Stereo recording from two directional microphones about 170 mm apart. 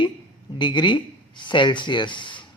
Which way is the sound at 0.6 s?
30° left (ahead or behind).